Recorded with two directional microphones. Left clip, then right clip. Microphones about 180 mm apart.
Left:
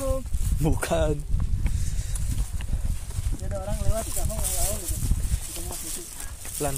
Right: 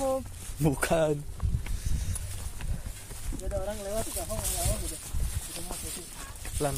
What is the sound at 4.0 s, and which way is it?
Speech, 45° left (ahead or behind).